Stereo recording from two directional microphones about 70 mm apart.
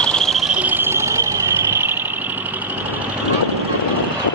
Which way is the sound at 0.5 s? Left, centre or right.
Right.